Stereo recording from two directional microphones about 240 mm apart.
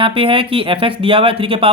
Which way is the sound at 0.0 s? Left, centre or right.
Right.